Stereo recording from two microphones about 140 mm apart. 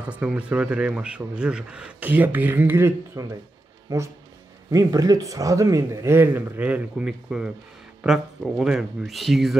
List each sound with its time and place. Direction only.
0.1 s speech: 10° right (ahead or behind)